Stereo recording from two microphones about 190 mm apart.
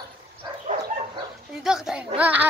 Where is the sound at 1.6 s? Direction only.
5° right (ahead or behind).